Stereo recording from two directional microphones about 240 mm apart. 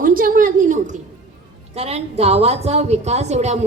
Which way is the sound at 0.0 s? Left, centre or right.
Right.